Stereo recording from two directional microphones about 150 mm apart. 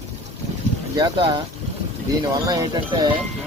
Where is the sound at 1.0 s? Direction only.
30° right (ahead or behind).